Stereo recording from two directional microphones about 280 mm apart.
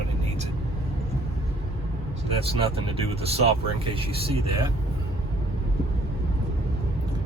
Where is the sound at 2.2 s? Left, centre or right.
Right.